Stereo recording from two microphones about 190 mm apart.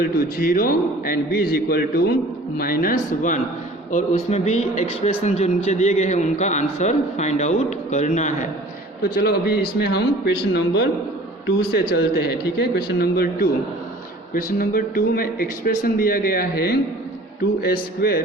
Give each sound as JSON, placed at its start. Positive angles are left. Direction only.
{"t": 0.0, "sound": "a man's voice", "side_deg": 50}
{"t": 9.0, "sound": "a man's voice", "side_deg": 55}